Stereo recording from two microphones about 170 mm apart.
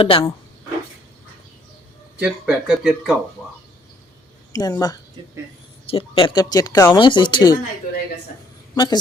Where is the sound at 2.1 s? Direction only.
5° right (ahead or behind).